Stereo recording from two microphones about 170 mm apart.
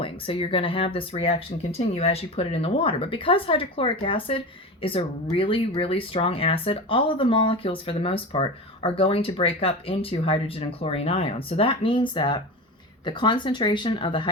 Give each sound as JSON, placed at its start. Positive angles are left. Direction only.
{"t": 0.0, "sound": "speech", "side_deg": 35}